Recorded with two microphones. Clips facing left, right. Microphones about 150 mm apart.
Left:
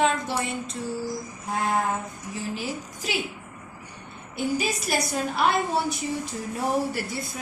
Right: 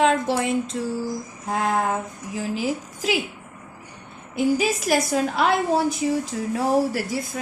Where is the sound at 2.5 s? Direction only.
90° right.